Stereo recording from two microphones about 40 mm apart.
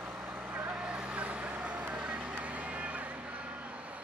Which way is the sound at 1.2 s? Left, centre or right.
Right.